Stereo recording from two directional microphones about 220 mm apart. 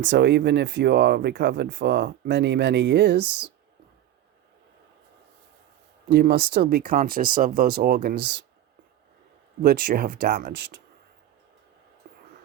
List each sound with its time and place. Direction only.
0.0 s speech: 50° right (ahead or behind)
6.1 s speech: 50° right (ahead or behind)
9.6 s speech: 45° right (ahead or behind)
12.0 s whispering: 45° right (ahead or behind)